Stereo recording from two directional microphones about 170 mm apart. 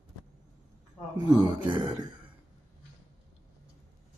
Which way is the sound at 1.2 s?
25° right (ahead or behind).